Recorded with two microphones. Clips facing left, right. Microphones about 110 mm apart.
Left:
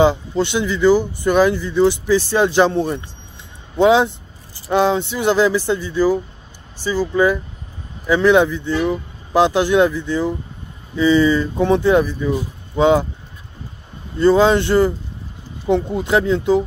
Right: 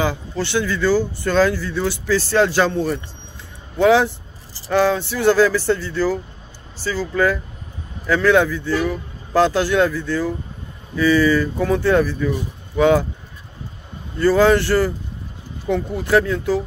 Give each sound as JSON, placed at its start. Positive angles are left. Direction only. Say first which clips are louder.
{"t": 0.0, "sound": "speech", "louder": "left 7 dB", "side_deg": 20}
{"t": 14.1, "sound": "speech", "louder": "left 1 dB", "side_deg": 20}